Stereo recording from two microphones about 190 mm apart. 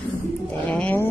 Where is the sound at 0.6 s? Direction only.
10° left (ahead or behind).